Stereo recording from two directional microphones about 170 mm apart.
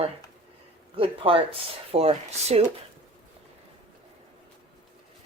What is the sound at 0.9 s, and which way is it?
Speech, 30° right (ahead or behind).